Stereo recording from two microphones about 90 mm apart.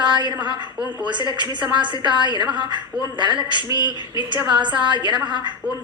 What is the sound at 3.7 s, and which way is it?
Speech, 55° left (ahead or behind).